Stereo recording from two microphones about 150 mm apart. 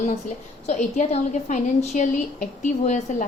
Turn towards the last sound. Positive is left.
turn(degrees=55)  # may be behind; listen again after turning